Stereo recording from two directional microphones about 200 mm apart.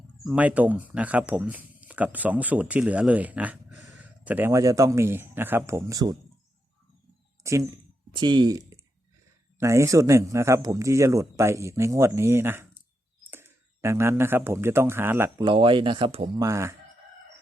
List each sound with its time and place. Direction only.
0.3 s speech: 10° right (ahead or behind)
7.4 s speech: 15° right (ahead or behind)
15.4 s speech: 25° right (ahead or behind)
16.4 s speech: 15° right (ahead or behind)